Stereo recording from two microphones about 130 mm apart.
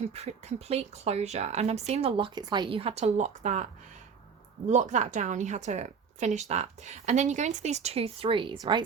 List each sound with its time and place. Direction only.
0.1 s a woman's voice: 55° right (ahead or behind)
4.7 s a woman's voice: 65° right (ahead or behind); by 8.5 s 40° right (ahead or behind)